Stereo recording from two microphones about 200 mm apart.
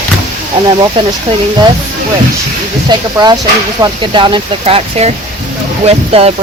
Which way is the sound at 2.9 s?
20° right (ahead or behind).